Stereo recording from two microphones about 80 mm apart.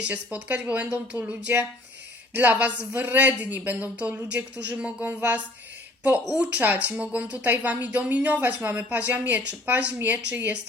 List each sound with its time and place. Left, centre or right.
0.1 s speech: centre